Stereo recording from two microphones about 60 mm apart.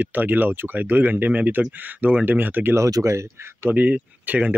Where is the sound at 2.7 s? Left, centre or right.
Right.